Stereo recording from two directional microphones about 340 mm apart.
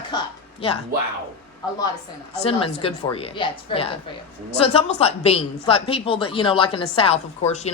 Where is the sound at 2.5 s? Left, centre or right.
Centre.